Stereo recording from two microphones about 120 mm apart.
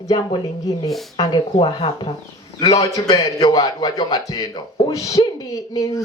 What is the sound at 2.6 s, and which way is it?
A man's voice, 30° left (ahead or behind).